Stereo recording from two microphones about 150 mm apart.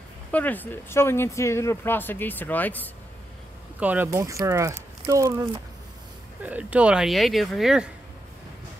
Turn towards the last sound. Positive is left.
turn(degrees=-5)  # may be behind; listen again after turning